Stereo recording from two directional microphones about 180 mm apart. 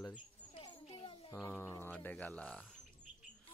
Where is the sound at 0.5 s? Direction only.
30° left (ahead or behind).